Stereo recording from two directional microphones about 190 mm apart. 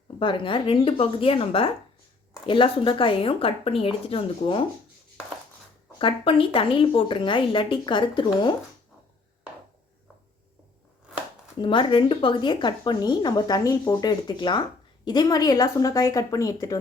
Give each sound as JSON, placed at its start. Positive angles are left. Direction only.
{"t": 0.2, "sound": "speech", "side_deg": 25}
{"t": 6.0, "sound": "speech", "side_deg": 25}
{"t": 11.6, "sound": "speech", "side_deg": 25}